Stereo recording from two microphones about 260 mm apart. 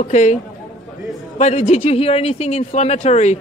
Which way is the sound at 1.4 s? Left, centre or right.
Left.